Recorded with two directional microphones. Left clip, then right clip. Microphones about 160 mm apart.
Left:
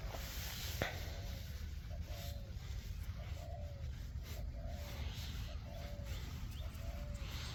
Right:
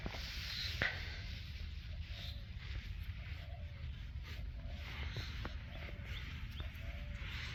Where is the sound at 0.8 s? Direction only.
20° left (ahead or behind).